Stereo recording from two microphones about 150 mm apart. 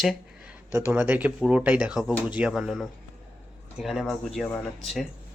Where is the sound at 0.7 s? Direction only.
15° right (ahead or behind).